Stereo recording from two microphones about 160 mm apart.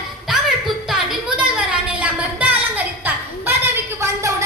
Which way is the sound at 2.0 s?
10° right (ahead or behind).